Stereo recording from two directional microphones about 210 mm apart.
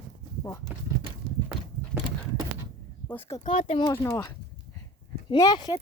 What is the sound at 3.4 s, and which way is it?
Speech, 30° left (ahead or behind).